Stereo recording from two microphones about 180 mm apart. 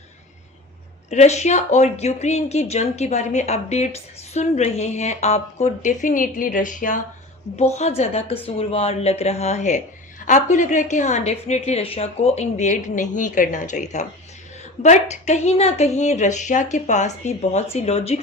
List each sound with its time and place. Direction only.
1.1 s a woman's voice: 40° left (ahead or behind)